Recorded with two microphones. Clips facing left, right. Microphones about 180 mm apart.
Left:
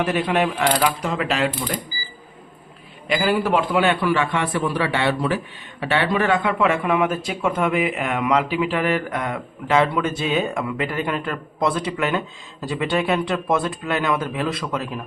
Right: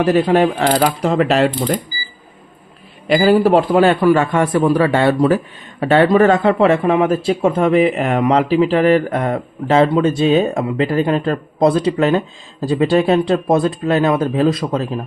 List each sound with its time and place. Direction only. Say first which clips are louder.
0.0 s a man's voice: right 7 dB; 40° right (ahead or behind)
1.5 s speech: right 8 dB; 55° right (ahead or behind)
3.1 s a man's voice: right 8 dB; 35° right (ahead or behind)